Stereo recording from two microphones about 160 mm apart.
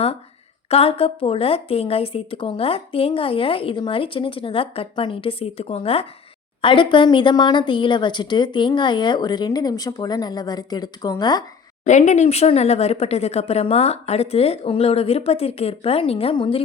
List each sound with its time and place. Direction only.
0.7 s a woman's voice: 40° left (ahead or behind)
11.9 s a woman's voice: 45° left (ahead or behind); by 16.6 s 30° left (ahead or behind)